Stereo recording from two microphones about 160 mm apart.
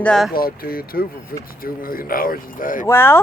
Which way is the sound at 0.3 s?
65° left (ahead or behind).